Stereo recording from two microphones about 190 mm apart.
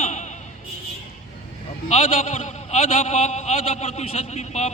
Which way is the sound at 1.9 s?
35° left (ahead or behind).